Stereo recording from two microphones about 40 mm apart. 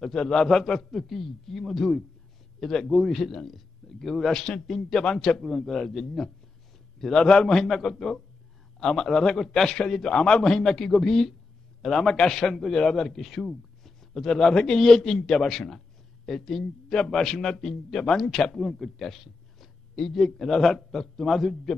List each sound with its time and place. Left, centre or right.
0.2 s a man's voice: centre
4.3 s speech: centre
4.6 s a man's voice: centre
4.9 s speech: centre
7.2 s speech: centre
7.6 s speech: centre
12.4 s a man's voice: centre